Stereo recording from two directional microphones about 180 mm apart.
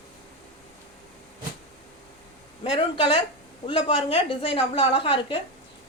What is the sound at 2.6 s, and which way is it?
A woman's voice, 30° left (ahead or behind).